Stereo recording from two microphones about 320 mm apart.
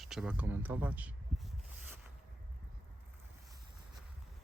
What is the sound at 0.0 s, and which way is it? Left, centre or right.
Speech, centre.